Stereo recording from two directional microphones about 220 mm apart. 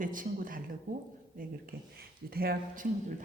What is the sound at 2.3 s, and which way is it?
Speech, 45° right (ahead or behind).